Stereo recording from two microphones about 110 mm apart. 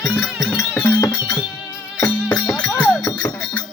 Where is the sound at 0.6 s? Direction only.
10° left (ahead or behind).